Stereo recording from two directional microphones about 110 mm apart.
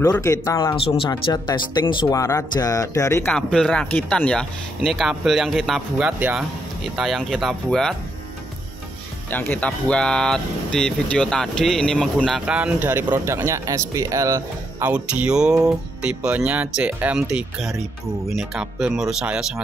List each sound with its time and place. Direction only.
0.2 s speech: 30° left (ahead or behind)
0.8 s speech: 55° left (ahead or behind)
1.3 s speech: 40° left (ahead or behind)
2.0 s speech: 30° left (ahead or behind)
3.3 s speech: 10° left (ahead or behind)
6.0 s speech: 15° right (ahead or behind)
7.0 s speech: centre (ahead or behind)
9.3 s speech: 15° left (ahead or behind)
12.4 s speech: 10° right (ahead or behind); by 14.9 s 30° right (ahead or behind)
14.9 s speech: 10° right (ahead or behind)